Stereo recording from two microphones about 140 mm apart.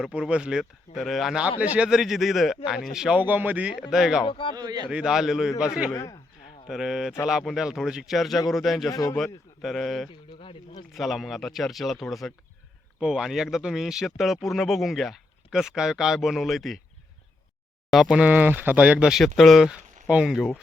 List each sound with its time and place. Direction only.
0.0 s speech: 5° right (ahead or behind)
4.3 s a man's voice: 35° left (ahead or behind)
4.5 s speech: 30° right (ahead or behind)
4.9 s speech: 5° right (ahead or behind)
5.9 s a man's voice: 25° left (ahead or behind)
6.7 s speech: 5° right (ahead or behind)
8.9 s a man's voice: 25° left (ahead or behind)
9.1 s speech: centre (ahead or behind)
10.3 s speech: 40° left (ahead or behind)
10.9 s speech: centre (ahead or behind)
17.9 s speech: 5° right (ahead or behind)